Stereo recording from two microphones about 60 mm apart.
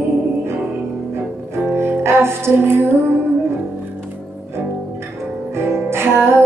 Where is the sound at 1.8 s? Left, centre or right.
Right.